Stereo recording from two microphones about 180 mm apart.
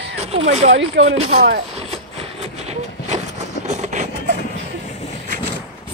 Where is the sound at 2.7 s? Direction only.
40° right (ahead or behind).